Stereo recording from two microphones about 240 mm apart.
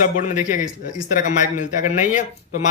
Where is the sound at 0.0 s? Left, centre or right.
Left.